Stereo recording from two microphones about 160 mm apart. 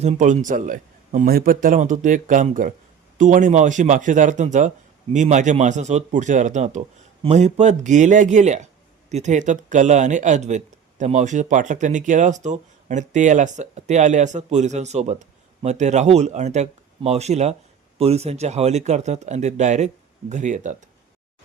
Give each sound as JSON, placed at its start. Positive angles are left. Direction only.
{"t": 0.0, "sound": "speech", "side_deg": -45}